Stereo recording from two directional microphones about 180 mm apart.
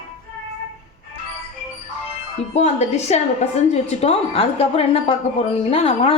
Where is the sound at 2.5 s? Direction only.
35° left (ahead or behind).